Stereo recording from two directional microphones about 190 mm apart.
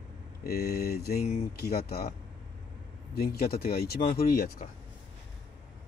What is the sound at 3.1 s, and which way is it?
Speech, 55° left (ahead or behind).